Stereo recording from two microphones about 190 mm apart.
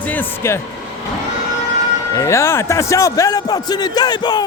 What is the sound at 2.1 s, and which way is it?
Speech, 15° left (ahead or behind).